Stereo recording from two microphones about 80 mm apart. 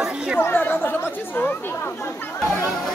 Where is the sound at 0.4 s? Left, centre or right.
Left.